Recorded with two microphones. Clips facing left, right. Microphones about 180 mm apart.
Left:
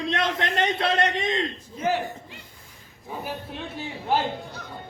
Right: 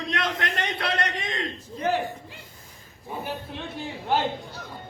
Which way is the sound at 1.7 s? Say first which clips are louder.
Even; centre (ahead or behind).